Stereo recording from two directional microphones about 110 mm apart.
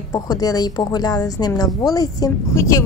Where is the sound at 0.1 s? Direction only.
35° left (ahead or behind).